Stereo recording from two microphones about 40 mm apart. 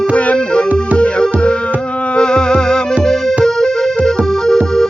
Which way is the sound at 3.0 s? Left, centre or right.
Centre.